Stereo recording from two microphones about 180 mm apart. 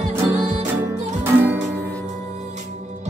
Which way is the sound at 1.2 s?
10° right (ahead or behind).